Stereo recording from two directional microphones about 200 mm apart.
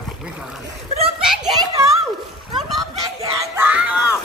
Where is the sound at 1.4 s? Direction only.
20° right (ahead or behind).